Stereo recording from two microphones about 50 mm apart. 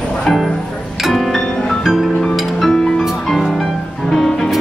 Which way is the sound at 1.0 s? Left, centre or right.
Centre.